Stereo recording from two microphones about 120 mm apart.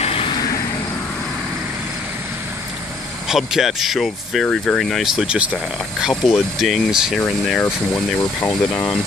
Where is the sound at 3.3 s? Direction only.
Centre (ahead or behind).